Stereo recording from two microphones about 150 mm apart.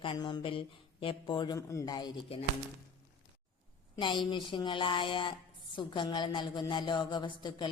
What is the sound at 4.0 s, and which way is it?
A man's voice, 30° left (ahead or behind).